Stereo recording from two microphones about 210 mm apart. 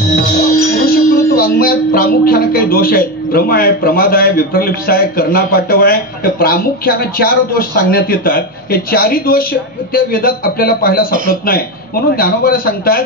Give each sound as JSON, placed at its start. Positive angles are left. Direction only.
{"t": 0.1, "sound": "speech", "side_deg": 45}